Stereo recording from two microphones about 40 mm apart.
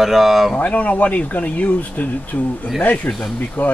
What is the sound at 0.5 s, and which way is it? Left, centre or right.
Speech, left.